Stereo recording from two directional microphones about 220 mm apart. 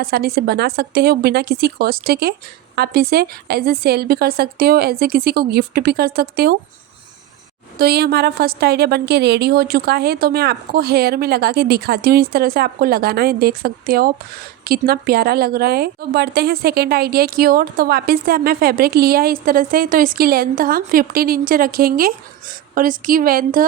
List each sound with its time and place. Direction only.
0.0 s a woman's voice: 45° right (ahead or behind)
7.8 s a woman's voice: 45° right (ahead or behind)